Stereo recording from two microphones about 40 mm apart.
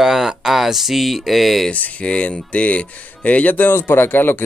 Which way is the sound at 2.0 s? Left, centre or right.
Left.